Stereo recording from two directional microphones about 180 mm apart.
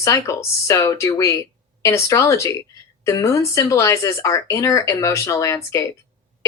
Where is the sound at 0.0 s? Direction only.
15° left (ahead or behind).